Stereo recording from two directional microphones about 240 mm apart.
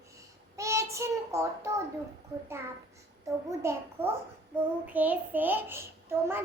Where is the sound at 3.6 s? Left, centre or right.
Centre.